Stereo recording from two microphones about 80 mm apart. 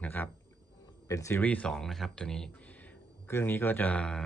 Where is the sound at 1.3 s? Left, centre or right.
Centre.